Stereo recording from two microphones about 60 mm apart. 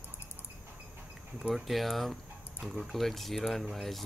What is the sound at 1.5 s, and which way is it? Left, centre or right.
Speech, centre.